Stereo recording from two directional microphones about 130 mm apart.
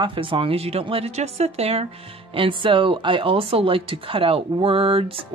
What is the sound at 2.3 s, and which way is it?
Speech, 40° right (ahead or behind).